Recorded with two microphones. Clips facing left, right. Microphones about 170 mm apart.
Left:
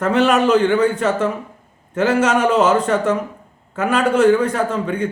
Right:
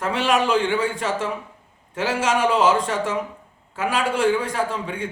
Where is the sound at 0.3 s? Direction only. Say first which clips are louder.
Left 2 dB; 45° left (ahead or behind).